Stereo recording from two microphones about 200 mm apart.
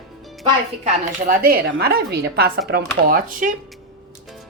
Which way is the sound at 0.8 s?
40° right (ahead or behind).